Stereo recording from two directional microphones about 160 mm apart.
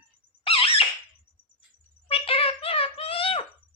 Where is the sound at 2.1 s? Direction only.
35° left (ahead or behind).